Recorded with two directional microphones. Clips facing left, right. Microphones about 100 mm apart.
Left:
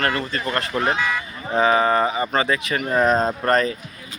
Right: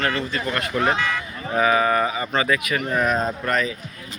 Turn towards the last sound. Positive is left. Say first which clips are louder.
# left 4 dB
turn(degrees=40)  # may be behind; listen again after turning